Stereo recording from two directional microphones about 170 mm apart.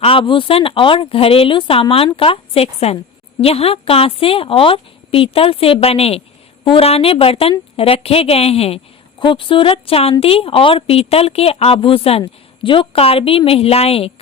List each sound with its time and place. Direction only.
0.0 s a woman's voice: 30° left (ahead or behind)